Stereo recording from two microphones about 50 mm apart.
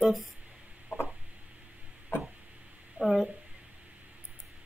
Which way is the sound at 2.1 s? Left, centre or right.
Left.